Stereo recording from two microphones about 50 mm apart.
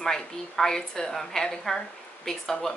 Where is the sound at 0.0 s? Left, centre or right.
Centre.